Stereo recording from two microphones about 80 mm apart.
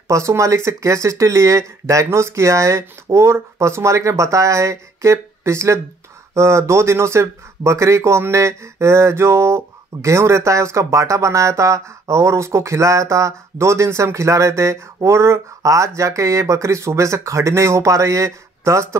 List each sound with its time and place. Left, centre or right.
0.1 s speech: right